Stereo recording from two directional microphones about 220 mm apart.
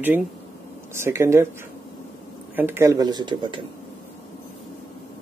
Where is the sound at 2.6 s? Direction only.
10° right (ahead or behind).